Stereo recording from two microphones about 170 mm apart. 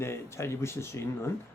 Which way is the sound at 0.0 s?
15° left (ahead or behind).